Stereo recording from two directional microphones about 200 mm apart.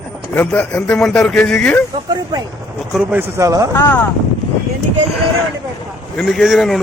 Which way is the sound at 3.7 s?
10° left (ahead or behind).